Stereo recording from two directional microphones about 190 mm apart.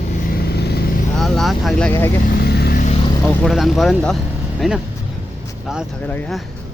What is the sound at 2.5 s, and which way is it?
Vehicle, 55° left (ahead or behind).